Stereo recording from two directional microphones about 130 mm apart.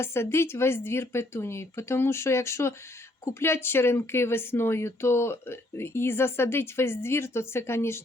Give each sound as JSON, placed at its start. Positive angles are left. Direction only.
{"t": 0.0, "sound": "speech", "side_deg": 20}